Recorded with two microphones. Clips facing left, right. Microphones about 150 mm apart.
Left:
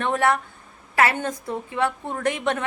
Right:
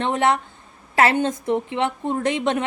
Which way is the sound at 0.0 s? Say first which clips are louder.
Right 2 dB; 20° right (ahead or behind).